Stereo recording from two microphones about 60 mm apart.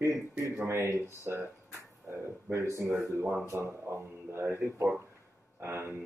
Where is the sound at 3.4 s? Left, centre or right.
Right.